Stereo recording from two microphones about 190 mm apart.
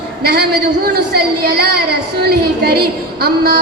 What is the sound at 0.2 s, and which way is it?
Speech, 55° right (ahead or behind).